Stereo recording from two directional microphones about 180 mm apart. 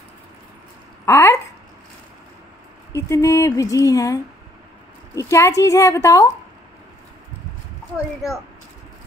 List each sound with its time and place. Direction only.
1.0 s speech: 15° left (ahead or behind)
2.9 s speech: 15° left (ahead or behind)